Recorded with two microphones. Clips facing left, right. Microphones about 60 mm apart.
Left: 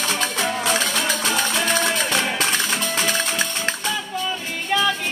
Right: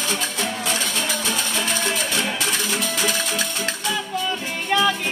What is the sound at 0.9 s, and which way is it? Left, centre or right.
Music, left.